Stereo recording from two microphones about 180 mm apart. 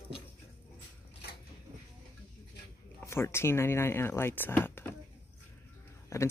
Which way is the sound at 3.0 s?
15° left (ahead or behind).